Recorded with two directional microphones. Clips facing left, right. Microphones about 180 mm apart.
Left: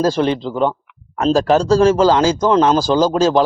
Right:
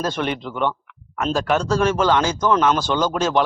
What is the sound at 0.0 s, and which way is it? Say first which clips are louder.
Speech: left 8 dB; 35° left (ahead or behind).